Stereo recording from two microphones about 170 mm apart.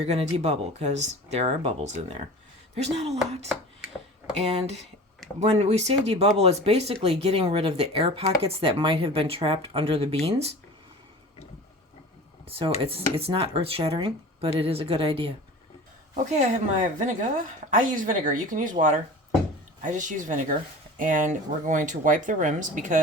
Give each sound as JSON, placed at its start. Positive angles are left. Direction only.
{"t": 0.0, "sound": "speech", "side_deg": -35}
{"t": 4.4, "sound": "speech", "side_deg": -40}
{"t": 12.5, "sound": "speech", "side_deg": -30}
{"t": 16.1, "sound": "speech", "side_deg": -45}